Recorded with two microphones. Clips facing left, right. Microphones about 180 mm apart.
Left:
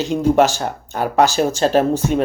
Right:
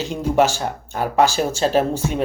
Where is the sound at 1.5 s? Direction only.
45° left (ahead or behind).